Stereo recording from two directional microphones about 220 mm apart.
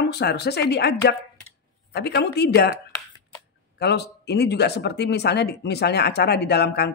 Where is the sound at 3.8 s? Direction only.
50° left (ahead or behind).